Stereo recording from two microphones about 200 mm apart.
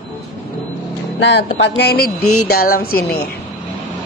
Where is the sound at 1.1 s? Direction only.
60° left (ahead or behind).